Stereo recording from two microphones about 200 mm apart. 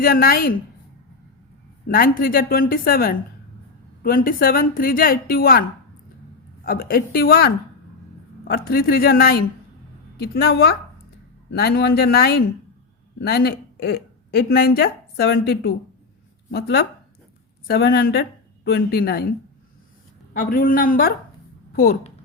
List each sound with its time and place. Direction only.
0.0 s a woman's voice: 45° left (ahead or behind)
1.9 s a woman's voice: 45° left (ahead or behind)
6.7 s a woman's voice: 45° left (ahead or behind)
20.3 s a woman's voice: 45° left (ahead or behind)